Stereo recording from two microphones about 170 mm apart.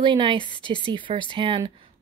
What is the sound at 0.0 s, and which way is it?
Speech, 30° right (ahead or behind).